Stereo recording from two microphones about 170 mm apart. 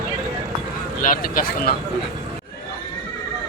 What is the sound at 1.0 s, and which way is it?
Speech, 55° left (ahead or behind).